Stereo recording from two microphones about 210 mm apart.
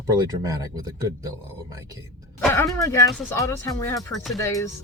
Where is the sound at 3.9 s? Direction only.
Centre (ahead or behind).